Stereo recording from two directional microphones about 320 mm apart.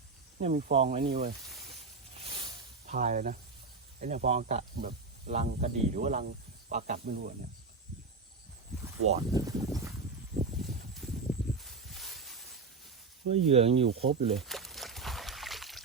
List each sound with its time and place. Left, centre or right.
0.3 s speech: right
2.8 s speech: right
9.0 s speech: centre
11.6 s a sound: centre
13.2 s speech: centre
14.3 s a sound: centre